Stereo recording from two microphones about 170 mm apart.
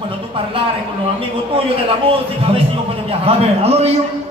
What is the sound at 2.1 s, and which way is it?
A man's voice, 35° right (ahead or behind).